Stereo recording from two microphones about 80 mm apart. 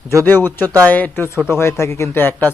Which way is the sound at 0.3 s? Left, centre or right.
Left.